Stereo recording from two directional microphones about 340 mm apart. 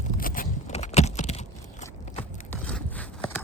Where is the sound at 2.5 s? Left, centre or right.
Centre.